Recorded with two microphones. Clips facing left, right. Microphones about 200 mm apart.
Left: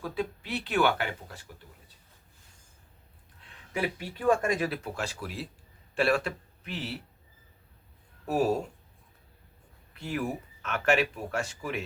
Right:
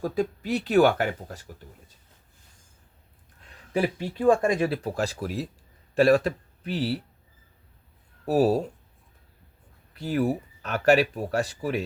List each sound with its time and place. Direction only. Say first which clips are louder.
0.0 s speech: right 6 dB; 40° right (ahead or behind)
3.7 s speech: right 6 dB; 30° right (ahead or behind)
8.2 s speech: right 5 dB; 35° right (ahead or behind)
9.9 s speech: right 7 dB; 35° right (ahead or behind)